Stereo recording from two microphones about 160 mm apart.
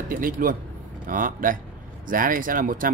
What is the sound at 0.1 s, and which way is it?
Speech, 60° right (ahead or behind).